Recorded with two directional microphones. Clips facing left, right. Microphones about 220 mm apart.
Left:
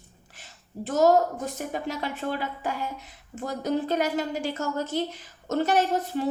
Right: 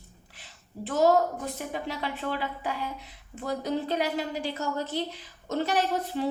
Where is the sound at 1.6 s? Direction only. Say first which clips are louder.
Left 2 dB; 45° left (ahead or behind).